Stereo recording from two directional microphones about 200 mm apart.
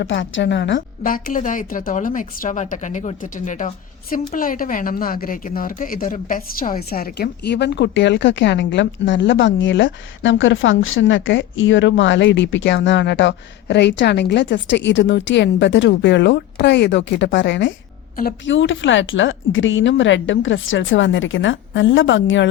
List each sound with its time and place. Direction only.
0.0 s speech: 65° left (ahead or behind)
0.8 s a woman's voice: 45° left (ahead or behind); by 22.4 s 65° left (ahead or behind)